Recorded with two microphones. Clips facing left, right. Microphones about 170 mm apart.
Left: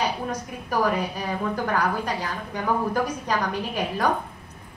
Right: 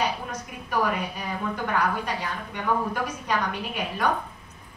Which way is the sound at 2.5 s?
35° left (ahead or behind).